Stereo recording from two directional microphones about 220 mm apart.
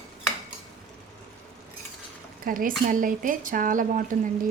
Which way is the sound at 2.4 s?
40° right (ahead or behind).